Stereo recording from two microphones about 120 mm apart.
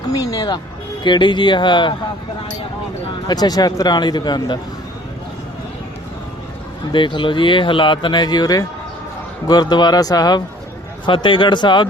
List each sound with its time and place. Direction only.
0.1 s speech: 30° left (ahead or behind)
3.2 s speech: 35° left (ahead or behind)
6.9 s speech: 40° left (ahead or behind)